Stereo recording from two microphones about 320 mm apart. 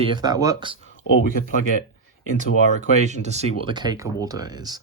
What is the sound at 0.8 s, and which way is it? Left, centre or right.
Speech, left.